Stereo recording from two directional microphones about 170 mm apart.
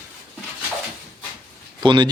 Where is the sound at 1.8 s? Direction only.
25° right (ahead or behind).